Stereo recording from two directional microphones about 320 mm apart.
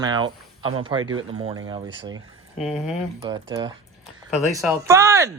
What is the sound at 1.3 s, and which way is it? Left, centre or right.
Speech, centre.